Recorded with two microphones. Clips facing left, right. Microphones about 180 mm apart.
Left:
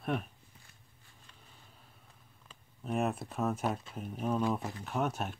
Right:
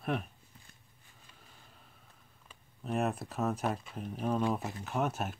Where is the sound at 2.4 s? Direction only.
Centre (ahead or behind).